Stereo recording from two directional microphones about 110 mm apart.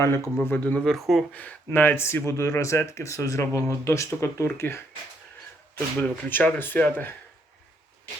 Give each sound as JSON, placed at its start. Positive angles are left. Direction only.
{"t": 0.0, "sound": "speech", "side_deg": 20}
{"t": 0.9, "sound": "speech", "side_deg": 0}
{"t": 1.3, "sound": "speech", "side_deg": 15}
{"t": 6.0, "sound": "speech", "side_deg": 15}